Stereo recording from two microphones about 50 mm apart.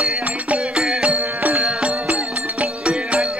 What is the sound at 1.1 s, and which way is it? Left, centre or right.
Music, right.